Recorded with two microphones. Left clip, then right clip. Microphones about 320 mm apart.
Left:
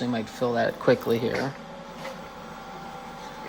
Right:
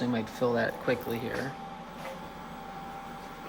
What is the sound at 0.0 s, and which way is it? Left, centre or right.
Speech, centre.